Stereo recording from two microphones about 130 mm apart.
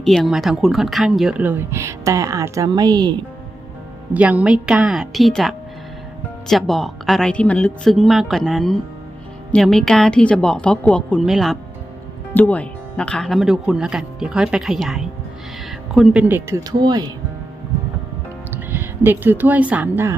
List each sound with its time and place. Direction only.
0.0 s speech: 5° left (ahead or behind)
1.4 s speech: 15° right (ahead or behind); by 3.2 s 30° right (ahead or behind)
4.1 s speech: 10° right (ahead or behind)
12.3 s speech: 10° left (ahead or behind); by 16.2 s 5° right (ahead or behind)
16.3 s speech: 20° right (ahead or behind)
16.7 s speech: 35° right (ahead or behind)
18.5 s speech: 15° right (ahead or behind)